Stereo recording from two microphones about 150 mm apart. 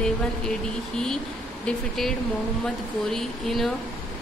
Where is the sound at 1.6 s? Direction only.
5° left (ahead or behind).